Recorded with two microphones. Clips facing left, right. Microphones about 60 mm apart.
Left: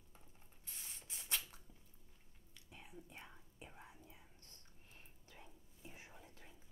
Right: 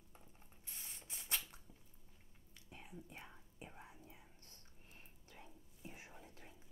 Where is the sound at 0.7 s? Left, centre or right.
Centre.